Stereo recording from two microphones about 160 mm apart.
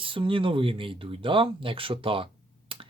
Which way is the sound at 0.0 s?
35° right (ahead or behind).